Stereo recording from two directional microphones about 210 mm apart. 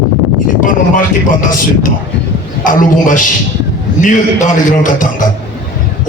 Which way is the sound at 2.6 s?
40° left (ahead or behind).